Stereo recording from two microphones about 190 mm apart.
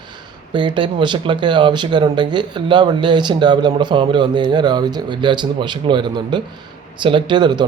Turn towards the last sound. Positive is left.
turn(degrees=-25)  # may be behind; listen again after turning